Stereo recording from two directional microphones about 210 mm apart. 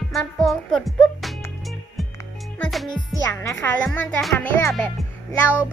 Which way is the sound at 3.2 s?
15° left (ahead or behind).